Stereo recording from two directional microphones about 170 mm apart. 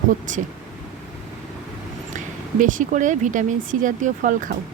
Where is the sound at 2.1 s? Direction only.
50° right (ahead or behind).